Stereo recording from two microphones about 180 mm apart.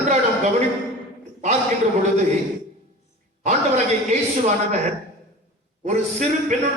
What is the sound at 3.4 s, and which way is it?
A man's voice, 40° right (ahead or behind).